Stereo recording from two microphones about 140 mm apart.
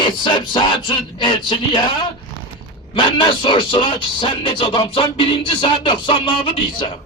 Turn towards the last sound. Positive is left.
turn(degrees=40)  # may be behind; listen again after turning